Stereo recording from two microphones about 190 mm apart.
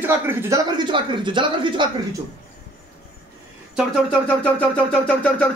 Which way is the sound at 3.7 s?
5° left (ahead or behind).